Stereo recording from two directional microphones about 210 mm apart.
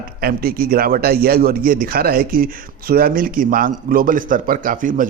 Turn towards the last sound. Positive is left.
turn(degrees=-40)  # may be behind; listen again after turning